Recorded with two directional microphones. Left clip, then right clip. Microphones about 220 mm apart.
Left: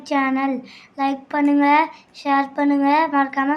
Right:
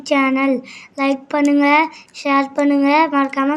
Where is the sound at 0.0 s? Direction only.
20° right (ahead or behind).